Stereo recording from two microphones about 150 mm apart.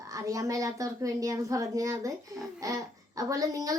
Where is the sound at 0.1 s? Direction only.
20° right (ahead or behind).